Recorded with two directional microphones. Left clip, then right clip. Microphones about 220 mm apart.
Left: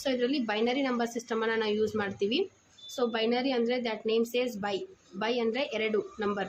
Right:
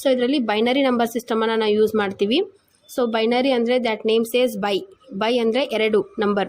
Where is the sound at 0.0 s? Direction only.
30° right (ahead or behind).